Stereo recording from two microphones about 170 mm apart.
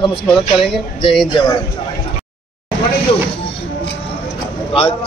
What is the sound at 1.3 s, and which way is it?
Speech, 25° left (ahead or behind).